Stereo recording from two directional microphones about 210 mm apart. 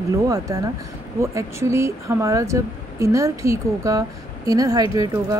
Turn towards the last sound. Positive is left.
turn(degrees=-15)  # may be behind; listen again after turning